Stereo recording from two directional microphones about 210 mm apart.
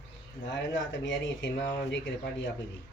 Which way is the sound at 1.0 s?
60° left (ahead or behind).